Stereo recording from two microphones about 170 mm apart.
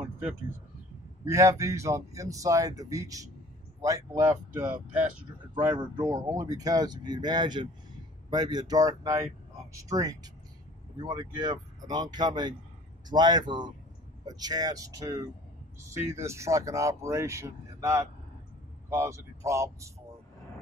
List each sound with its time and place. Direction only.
1.2 s speech: 15° right (ahead or behind)